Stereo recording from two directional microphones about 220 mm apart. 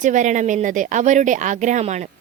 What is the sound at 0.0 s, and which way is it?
Speech, 35° right (ahead or behind).